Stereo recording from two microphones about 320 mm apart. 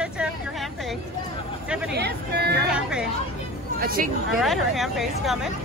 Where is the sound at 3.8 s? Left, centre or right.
Right.